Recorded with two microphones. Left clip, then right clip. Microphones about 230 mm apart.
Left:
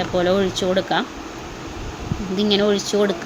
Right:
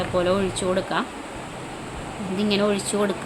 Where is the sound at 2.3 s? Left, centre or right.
Centre.